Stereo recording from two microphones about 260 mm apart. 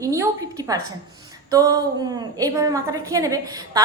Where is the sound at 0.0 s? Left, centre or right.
Centre.